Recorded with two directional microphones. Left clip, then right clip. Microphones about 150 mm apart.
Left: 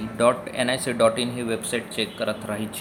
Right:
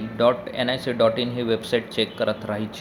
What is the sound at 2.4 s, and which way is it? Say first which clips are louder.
Speech: right 2 dB; 10° right (ahead or behind).